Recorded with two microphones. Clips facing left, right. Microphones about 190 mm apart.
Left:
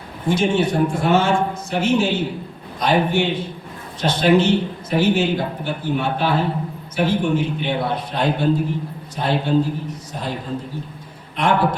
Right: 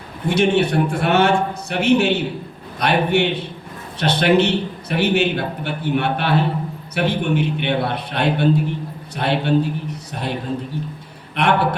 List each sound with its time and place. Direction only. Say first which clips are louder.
0.3 s a man's voice: right 1 dB; 65° right (ahead or behind)
11.3 s a man's voice: even; 65° right (ahead or behind)